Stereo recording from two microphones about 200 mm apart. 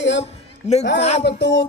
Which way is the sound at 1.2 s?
60° left (ahead or behind).